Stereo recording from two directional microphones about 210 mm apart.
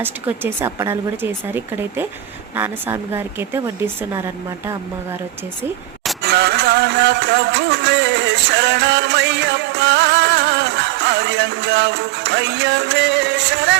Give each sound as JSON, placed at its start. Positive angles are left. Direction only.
{"t": 0.0, "sound": "speech", "side_deg": -10}
{"t": 6.2, "sound": "speech", "side_deg": -50}